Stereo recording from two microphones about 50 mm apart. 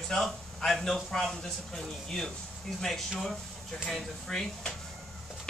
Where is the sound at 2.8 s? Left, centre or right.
Centre.